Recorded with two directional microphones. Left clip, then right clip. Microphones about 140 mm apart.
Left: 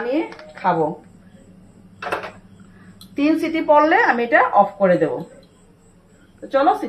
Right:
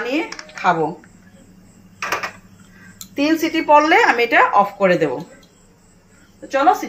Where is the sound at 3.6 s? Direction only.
70° right (ahead or behind).